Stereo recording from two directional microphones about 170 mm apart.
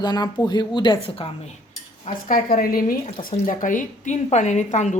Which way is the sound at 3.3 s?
45° left (ahead or behind).